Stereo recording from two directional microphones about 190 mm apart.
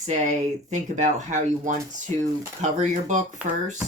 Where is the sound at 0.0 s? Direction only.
35° right (ahead or behind).